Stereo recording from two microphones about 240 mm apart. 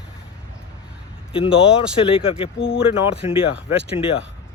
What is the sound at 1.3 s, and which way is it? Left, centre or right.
Speech, left.